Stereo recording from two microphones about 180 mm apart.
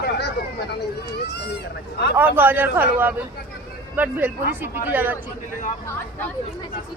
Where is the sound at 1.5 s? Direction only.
70° left (ahead or behind).